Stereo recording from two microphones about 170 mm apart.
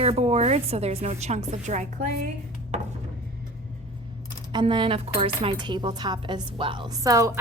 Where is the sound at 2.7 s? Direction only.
40° right (ahead or behind).